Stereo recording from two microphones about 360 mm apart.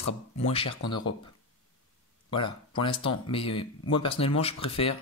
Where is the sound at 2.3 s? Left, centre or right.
Centre.